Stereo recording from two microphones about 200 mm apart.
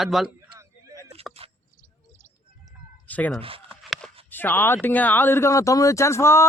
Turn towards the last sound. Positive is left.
turn(degrees=15)  # may be behind; listen again after turning